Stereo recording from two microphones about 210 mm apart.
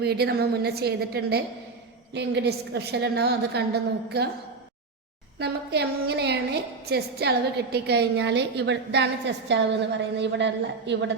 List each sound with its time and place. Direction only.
0.0 s a woman's voice: 50° right (ahead or behind)
5.4 s a woman's voice: 50° right (ahead or behind)